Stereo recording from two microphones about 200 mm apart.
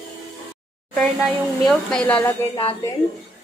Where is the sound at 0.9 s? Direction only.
Centre (ahead or behind).